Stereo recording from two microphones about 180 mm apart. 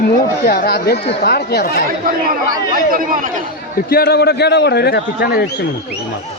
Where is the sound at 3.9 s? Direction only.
60° left (ahead or behind).